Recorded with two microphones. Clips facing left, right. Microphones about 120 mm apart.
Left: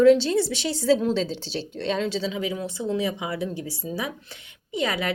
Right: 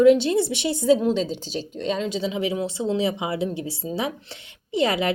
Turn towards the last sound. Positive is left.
turn(degrees=-25)  # may be behind; listen again after turning